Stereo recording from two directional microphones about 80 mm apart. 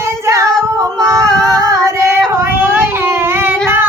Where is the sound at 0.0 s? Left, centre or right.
Right.